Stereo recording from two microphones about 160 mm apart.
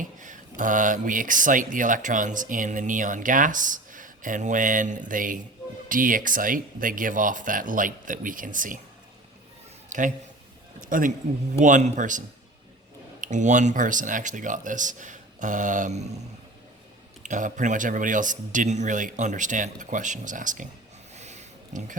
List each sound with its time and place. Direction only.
0.0 s speech: 50° right (ahead or behind)
9.9 s a man's voice: 50° right (ahead or behind)
13.2 s speech: 50° right (ahead or behind)
17.2 s speech: 50° right (ahead or behind)
21.2 s a sound: 45° right (ahead or behind)